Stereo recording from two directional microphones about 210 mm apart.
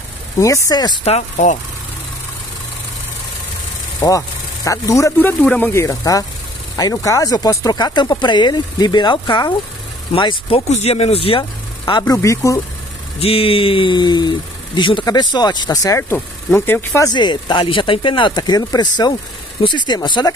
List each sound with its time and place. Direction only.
0.7 s speech: 20° left (ahead or behind)
1.0 s speech: 30° left (ahead or behind)
4.6 s speech: 15° left (ahead or behind)
13.2 s speech: 25° left (ahead or behind)